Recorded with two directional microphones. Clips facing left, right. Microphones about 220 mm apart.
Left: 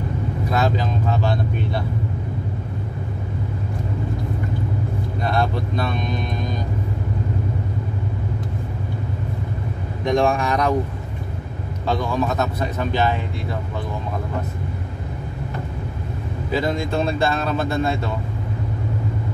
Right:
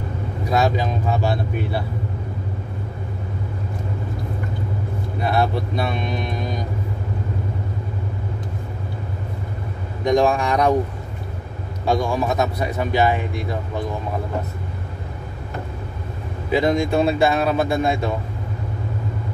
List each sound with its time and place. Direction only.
0.5 s speech: 10° right (ahead or behind)
5.2 s speech: 5° right (ahead or behind)
10.0 s speech: 20° right (ahead or behind)
11.8 s speech: 10° right (ahead or behind)
16.4 s speech: 15° right (ahead or behind)